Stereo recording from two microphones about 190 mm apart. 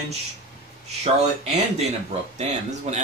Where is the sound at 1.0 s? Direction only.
35° right (ahead or behind).